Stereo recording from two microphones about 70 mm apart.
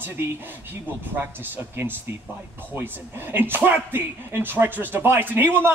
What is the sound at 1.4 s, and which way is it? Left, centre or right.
Speech, right.